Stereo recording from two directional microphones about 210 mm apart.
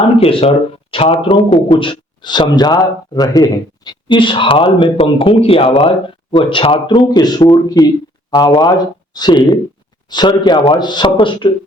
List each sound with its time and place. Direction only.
0.2 s speech: 25° left (ahead or behind)